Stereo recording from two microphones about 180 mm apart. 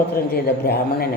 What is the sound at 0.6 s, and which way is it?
Speech, 60° left (ahead or behind).